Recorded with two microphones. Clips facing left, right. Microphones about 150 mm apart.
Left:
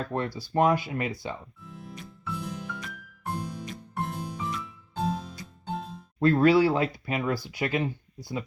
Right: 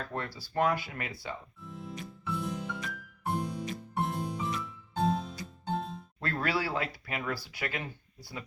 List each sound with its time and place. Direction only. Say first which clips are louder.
0.0 s speech: left 7 dB; 25° left (ahead or behind)
1.6 s music: right 1 dB; centre (ahead or behind)
6.1 s speech: left 13 dB; 25° left (ahead or behind)